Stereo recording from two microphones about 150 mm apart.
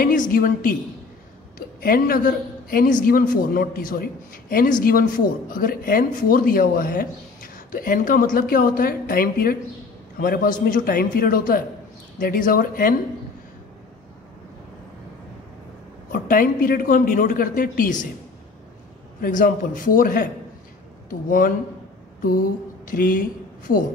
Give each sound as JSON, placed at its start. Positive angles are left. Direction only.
{"t": 0.0, "sound": "a woman's voice", "side_deg": 65}
{"t": 1.8, "sound": "a man's voice", "side_deg": 75}
{"t": 16.1, "sound": "a woman's voice", "side_deg": 65}
{"t": 19.2, "sound": "a woman's voice", "side_deg": 65}
{"t": 22.8, "sound": "a man's voice", "side_deg": 65}